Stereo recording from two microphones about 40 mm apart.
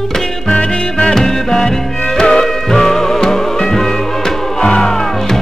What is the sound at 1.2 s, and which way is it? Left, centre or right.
Music, centre.